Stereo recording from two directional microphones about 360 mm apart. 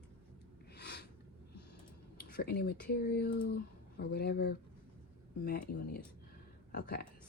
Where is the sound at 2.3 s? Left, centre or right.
Left.